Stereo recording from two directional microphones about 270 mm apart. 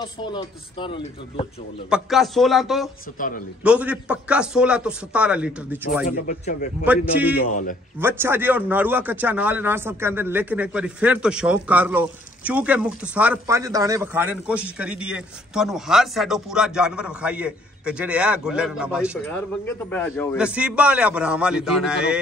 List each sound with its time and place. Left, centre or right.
0.2 s speech: centre
1.9 s a man's voice: centre
3.2 s a man's voice: left
3.6 s a man's voice: centre
6.0 s speech: left
6.8 s a man's voice: centre
19.6 s speech: centre
20.3 s a man's voice: centre